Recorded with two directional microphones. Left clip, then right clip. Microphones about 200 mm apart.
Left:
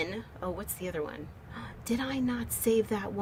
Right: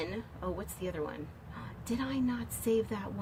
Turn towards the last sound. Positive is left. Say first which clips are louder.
# left 4 dB
turn(degrees=55)  # may be behind; listen again after turning